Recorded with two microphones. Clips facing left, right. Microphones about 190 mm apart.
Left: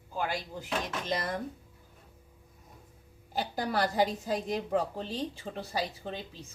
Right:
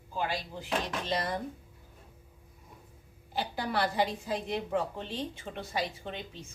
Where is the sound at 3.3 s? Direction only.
40° left (ahead or behind).